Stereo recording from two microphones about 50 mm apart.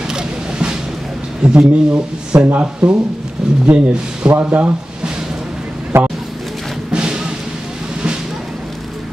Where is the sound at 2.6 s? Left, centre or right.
Right.